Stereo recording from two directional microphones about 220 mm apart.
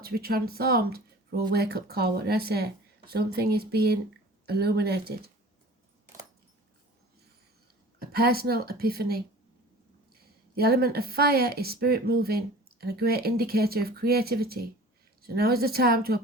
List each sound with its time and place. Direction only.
0.0 s speech: 45° right (ahead or behind)
8.1 s speech: 45° right (ahead or behind)
10.5 s speech: 45° right (ahead or behind)